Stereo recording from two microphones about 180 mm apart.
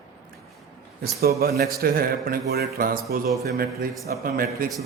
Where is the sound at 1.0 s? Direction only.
60° right (ahead or behind).